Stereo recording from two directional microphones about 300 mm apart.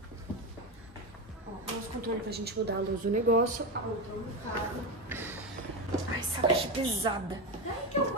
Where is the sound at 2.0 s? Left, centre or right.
Right.